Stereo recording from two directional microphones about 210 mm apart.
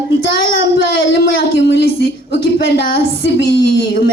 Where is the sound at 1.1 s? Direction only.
50° left (ahead or behind).